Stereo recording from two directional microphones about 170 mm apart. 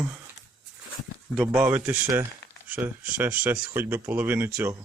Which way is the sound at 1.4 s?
10° right (ahead or behind).